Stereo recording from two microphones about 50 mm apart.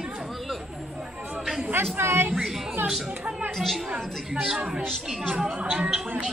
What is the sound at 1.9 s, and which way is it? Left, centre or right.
Speech, right.